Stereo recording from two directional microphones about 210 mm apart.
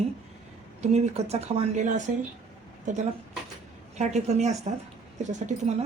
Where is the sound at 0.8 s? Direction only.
30° right (ahead or behind).